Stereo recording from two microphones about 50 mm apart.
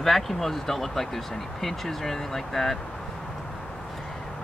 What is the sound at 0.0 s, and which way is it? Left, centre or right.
Speech, centre.